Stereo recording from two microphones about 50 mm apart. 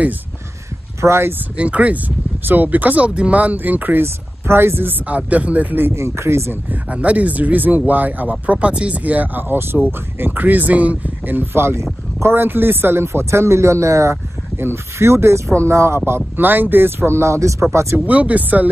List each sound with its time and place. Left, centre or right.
1.0 s speech: right
1.6 s speech: right
4.0 s speech: right
5.0 s speech: right
5.9 s speech: right
6.9 s speech: right
11.3 s speech: right
14.6 s speech: right
16.3 s speech: right
17.9 s speech: right